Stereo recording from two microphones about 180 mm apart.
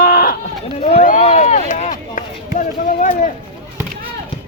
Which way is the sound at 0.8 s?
35° left (ahead or behind).